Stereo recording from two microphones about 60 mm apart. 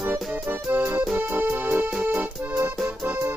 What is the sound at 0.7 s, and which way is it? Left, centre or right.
Music, right.